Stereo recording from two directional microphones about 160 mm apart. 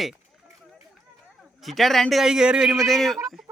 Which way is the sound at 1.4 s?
Centre (ahead or behind).